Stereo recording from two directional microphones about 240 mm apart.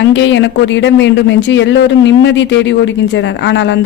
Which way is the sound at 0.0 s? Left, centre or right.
Left.